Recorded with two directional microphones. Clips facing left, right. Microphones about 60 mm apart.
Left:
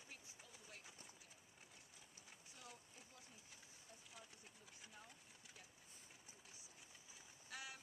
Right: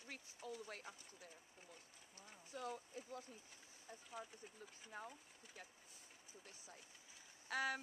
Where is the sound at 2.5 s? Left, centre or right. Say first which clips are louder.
Right 15 dB; right.